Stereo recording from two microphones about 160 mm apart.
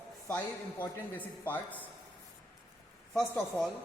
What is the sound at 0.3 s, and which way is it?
A man's voice, 10° left (ahead or behind).